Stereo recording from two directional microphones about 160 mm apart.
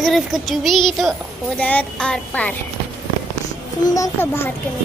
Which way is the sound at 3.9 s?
20° left (ahead or behind).